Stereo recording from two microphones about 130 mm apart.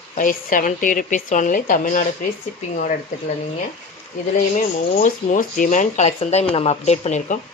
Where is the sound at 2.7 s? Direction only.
65° left (ahead or behind).